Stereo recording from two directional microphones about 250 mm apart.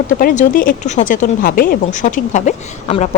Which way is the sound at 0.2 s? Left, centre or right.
Left.